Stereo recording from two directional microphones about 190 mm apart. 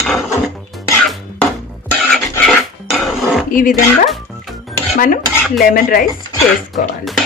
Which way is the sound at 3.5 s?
45° left (ahead or behind).